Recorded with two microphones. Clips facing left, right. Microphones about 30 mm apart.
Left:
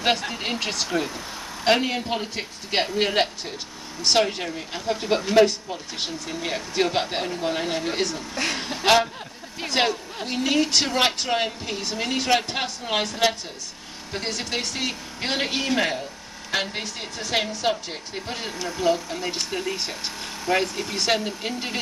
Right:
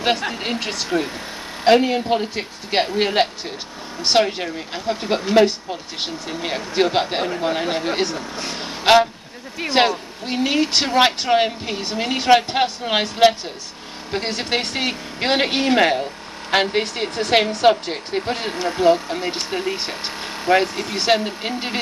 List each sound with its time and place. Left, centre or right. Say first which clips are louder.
0.0 s speech: right 3 dB; centre
1.0 s vehicle: right 3 dB; right
1.7 s a woman's voice: right 6 dB; centre; by 8.3 s right
8.5 s vehicle: right 5 dB; centre
9.7 s a woman's voice: right 5 dB; right
17.6 s a woman's voice: right 9 dB; right